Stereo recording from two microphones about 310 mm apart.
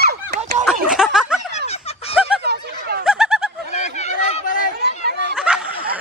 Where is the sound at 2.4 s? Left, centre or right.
Right.